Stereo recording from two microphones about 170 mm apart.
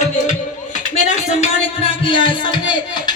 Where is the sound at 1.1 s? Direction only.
40° left (ahead or behind).